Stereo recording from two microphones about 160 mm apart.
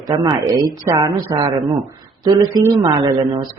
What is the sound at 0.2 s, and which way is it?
A man's voice, 25° right (ahead or behind).